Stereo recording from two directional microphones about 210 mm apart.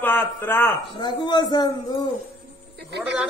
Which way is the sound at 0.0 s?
10° left (ahead or behind).